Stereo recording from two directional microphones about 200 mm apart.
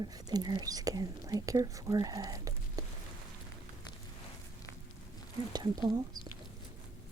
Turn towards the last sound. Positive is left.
turn(degrees=-20)  # may be behind; listen again after turning